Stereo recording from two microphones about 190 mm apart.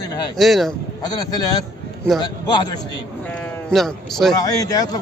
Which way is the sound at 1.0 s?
20° left (ahead or behind).